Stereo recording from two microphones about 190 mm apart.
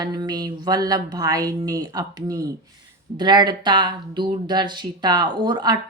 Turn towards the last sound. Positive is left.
turn(degrees=-20)  # may be behind; listen again after turning